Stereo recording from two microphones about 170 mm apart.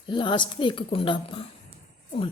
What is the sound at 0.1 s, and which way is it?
A woman's voice, 30° left (ahead or behind).